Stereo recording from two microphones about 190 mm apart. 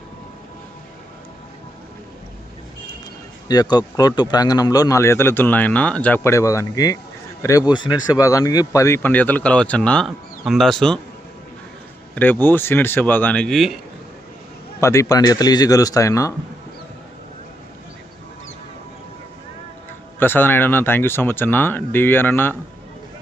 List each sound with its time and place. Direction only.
3.5 s speech: 20° left (ahead or behind); by 11.0 s 5° left (ahead or behind)
12.1 s speech: 10° left (ahead or behind)
14.8 s speech: 15° left (ahead or behind)
20.1 s speech: 10° left (ahead or behind)